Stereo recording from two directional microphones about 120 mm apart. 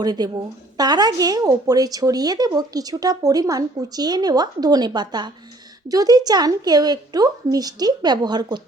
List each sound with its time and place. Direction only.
0.0 s a woman's voice: 35° right (ahead or behind)